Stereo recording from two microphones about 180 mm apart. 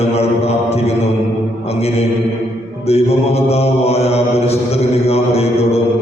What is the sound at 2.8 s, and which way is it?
Mantra, 35° left (ahead or behind).